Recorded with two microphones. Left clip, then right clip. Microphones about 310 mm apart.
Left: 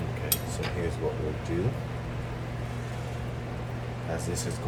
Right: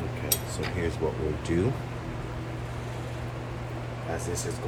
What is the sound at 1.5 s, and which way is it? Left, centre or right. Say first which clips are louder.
Speech: right 4 dB; right.